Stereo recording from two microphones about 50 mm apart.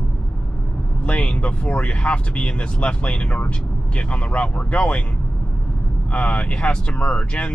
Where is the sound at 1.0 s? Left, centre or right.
Left.